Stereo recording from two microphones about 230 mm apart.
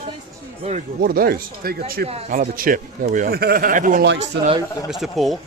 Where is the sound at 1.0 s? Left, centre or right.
Right.